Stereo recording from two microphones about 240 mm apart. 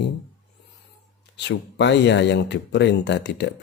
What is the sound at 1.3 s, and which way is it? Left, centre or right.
Speech, left.